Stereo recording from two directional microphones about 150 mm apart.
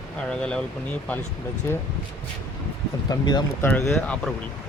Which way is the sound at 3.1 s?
30° left (ahead or behind).